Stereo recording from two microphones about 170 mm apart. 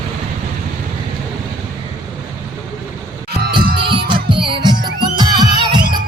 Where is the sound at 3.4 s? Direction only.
60° right (ahead or behind).